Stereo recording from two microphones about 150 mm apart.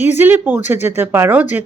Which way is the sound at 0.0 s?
15° right (ahead or behind).